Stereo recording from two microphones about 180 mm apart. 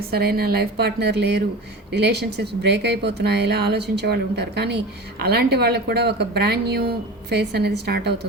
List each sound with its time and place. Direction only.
0.1 s a woman's voice: 60° right (ahead or behind)